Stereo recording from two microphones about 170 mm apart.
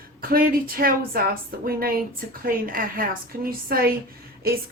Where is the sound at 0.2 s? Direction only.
60° right (ahead or behind).